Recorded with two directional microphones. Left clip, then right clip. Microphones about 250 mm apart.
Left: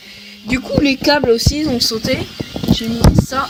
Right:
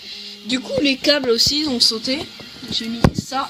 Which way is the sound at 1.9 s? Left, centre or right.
Left.